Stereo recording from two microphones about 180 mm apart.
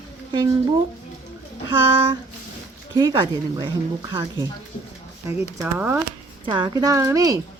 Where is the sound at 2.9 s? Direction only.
25° right (ahead or behind).